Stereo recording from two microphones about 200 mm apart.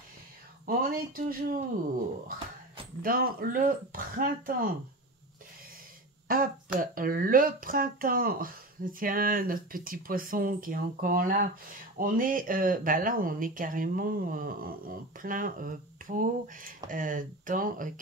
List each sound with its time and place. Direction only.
0.7 s speech: 45° right (ahead or behind)
3.0 s speech: 45° right (ahead or behind)
6.2 s speech: 45° right (ahead or behind)